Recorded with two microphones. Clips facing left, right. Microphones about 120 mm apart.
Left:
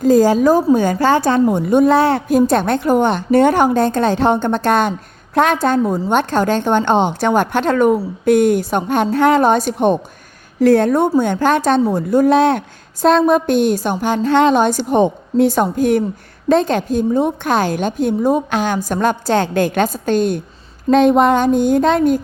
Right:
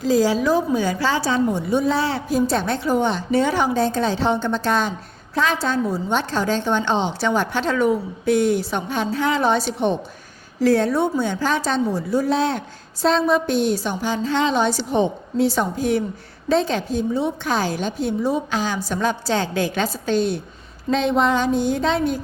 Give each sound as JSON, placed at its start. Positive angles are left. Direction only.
{"t": 0.0, "sound": "a woman's voice", "side_deg": 50}